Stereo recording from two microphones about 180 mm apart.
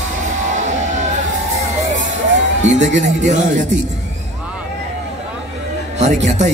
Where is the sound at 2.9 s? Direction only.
40° right (ahead or behind).